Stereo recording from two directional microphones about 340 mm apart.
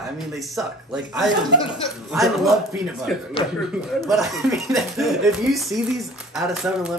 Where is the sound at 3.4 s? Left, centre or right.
Centre.